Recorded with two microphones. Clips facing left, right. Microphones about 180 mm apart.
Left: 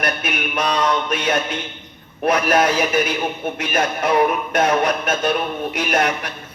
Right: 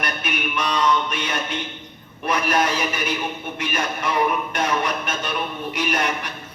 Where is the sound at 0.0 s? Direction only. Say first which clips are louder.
Left 3 dB; 45° left (ahead or behind).